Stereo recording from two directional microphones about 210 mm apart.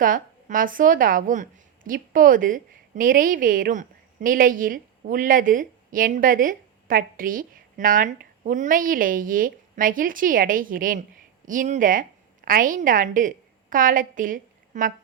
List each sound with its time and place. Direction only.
0.0 s a woman's voice: 40° right (ahead or behind)